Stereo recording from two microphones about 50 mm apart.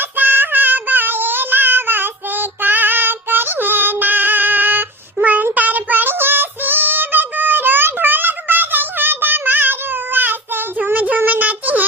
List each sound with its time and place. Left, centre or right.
0.0 s synthetic singing: right
5.1 s child singing: right
11.3 s a sound: right